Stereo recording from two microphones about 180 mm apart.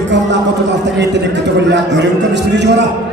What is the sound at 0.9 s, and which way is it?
A man's voice, 75° right (ahead or behind).